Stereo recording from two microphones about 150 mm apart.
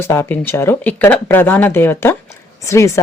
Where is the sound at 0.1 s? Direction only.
15° left (ahead or behind).